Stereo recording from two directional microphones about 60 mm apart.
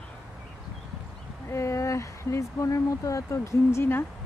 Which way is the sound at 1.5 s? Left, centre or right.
Left.